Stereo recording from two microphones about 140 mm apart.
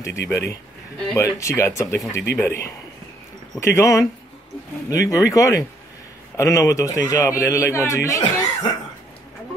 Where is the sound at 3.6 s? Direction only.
20° left (ahead or behind).